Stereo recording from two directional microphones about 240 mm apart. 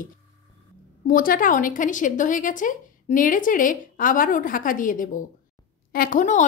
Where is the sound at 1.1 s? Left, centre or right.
Left.